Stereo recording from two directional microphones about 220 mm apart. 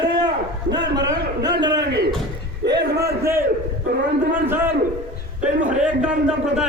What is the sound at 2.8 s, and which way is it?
Speech, 50° right (ahead or behind).